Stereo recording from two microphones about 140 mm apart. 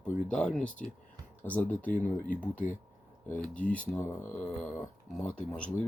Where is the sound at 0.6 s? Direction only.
65° left (ahead or behind).